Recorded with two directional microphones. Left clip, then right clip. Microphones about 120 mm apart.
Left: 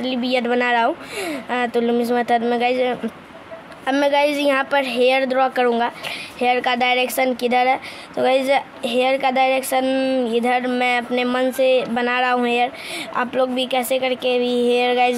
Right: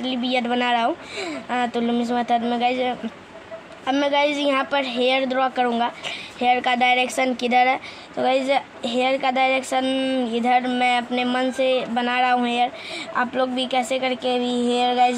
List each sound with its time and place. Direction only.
0.0 s a woman's voice: 40° left (ahead or behind); by 7.8 s 20° left (ahead or behind)
8.2 s a woman's voice: 35° left (ahead or behind)